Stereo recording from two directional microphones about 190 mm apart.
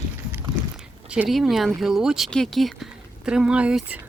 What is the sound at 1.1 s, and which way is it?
Speech, 5° right (ahead or behind).